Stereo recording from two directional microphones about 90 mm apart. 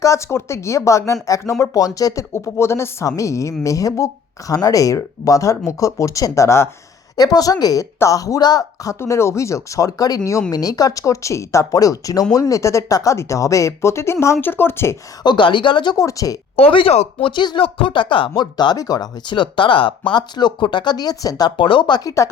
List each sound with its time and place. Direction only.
0.0 s speech: 35° left (ahead or behind)
2.3 s speech: 30° left (ahead or behind)
7.2 s a woman's voice: 45° left (ahead or behind)
9.0 s speech: 30° left (ahead or behind)
15.2 s speech: 55° left (ahead or behind)
16.0 s speech: 40° left (ahead or behind)
16.6 s speech: 90° left; by 18.4 s 65° left (ahead or behind)
18.5 s speech: 50° left (ahead or behind)
21.6 s speech: 65° left (ahead or behind)